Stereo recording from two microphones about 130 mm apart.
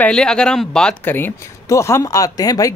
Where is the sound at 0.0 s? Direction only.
5° left (ahead or behind).